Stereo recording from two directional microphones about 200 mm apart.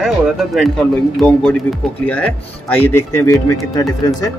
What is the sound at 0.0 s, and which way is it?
Speech, centre (ahead or behind).